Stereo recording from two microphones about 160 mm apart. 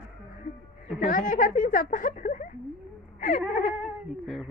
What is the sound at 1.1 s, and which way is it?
A woman's voice, 60° left (ahead or behind).